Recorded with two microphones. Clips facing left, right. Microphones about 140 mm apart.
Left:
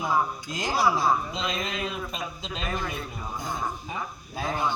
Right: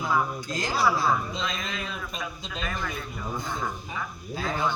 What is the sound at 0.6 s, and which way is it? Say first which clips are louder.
Speech: left 1 dB; 15° left (ahead or behind).